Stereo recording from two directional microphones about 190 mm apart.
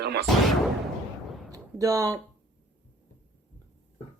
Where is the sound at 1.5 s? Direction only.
15° right (ahead or behind).